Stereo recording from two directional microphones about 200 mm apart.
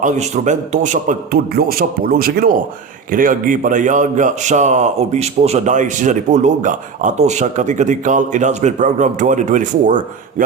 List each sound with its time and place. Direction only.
0.0 s a man's voice: 35° right (ahead or behind)